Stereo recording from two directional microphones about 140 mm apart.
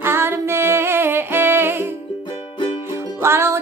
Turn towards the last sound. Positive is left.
turn(degrees=-20)  # may be behind; listen again after turning